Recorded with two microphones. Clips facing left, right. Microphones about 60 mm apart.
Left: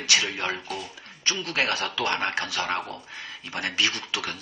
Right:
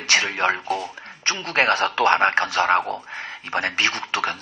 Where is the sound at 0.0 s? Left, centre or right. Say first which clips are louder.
Right 6 dB; right.